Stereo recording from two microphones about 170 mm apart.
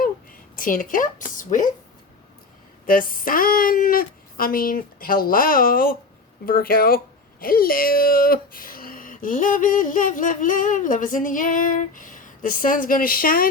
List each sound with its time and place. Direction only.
0.0 s a woman's voice: 55° left (ahead or behind)
2.8 s speech: 55° left (ahead or behind)